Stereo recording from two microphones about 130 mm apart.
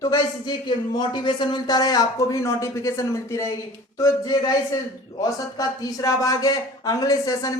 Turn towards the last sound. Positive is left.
turn(degrees=30)  # may be behind; listen again after turning